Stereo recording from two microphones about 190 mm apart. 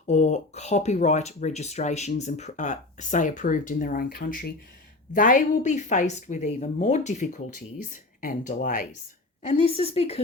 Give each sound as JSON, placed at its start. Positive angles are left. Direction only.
{"t": 0.0, "sound": "a woman's voice", "side_deg": 40}
{"t": 9.5, "sound": "speech", "side_deg": 35}